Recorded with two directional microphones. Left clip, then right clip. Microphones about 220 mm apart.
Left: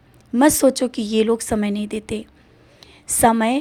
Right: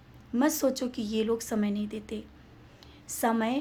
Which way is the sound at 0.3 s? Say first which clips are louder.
Left 12 dB; 40° left (ahead or behind).